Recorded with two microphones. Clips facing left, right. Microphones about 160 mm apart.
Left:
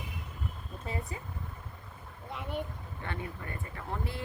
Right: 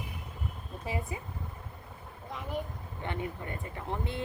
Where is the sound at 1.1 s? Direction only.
15° right (ahead or behind).